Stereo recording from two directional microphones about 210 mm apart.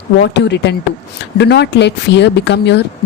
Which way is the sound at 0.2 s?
55° left (ahead or behind).